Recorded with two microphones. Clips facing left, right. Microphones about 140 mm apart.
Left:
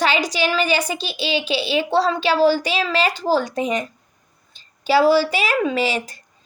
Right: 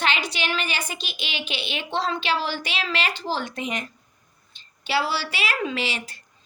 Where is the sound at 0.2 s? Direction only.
35° left (ahead or behind).